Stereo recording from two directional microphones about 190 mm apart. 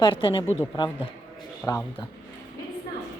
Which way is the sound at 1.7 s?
20° left (ahead or behind).